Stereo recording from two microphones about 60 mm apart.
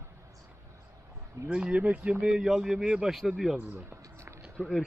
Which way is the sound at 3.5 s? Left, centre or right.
Right.